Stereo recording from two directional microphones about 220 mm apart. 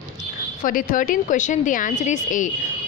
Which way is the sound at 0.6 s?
40° left (ahead or behind).